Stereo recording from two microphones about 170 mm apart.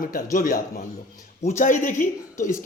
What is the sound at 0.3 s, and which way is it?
Speech, 50° left (ahead or behind).